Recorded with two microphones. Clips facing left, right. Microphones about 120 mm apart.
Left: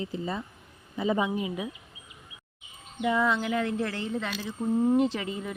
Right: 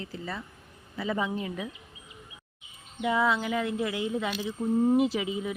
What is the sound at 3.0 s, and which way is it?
Speech, 5° right (ahead or behind).